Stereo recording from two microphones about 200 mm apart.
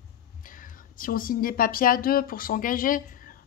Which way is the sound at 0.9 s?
45° left (ahead or behind).